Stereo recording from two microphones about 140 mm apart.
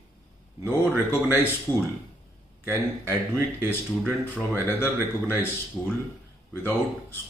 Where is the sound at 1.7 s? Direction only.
15° left (ahead or behind).